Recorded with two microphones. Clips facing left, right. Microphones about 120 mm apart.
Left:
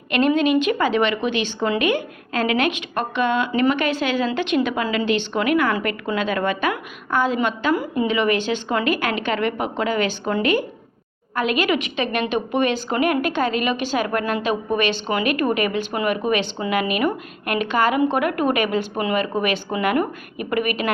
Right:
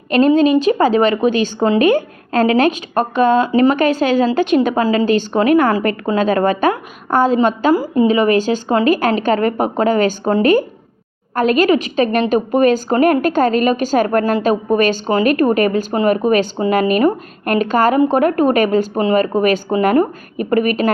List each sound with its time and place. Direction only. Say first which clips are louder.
0.1 s a woman's voice: right 6 dB; 35° right (ahead or behind)